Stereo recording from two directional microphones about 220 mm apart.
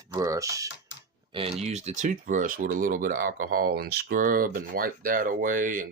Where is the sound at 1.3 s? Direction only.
25° right (ahead or behind).